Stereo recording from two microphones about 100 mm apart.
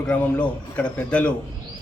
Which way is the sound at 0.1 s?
15° left (ahead or behind).